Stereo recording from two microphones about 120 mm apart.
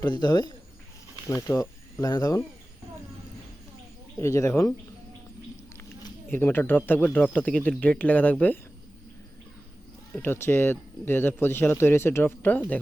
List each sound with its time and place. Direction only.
0.0 s speech: 40° left (ahead or behind)
4.2 s speech: 25° left (ahead or behind)
6.3 s speech: 15° left (ahead or behind)
10.2 s speech: 20° left (ahead or behind)